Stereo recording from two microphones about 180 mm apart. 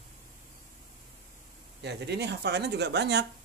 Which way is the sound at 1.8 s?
70° right (ahead or behind).